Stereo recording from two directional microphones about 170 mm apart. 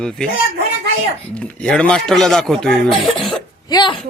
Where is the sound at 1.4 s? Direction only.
5° left (ahead or behind).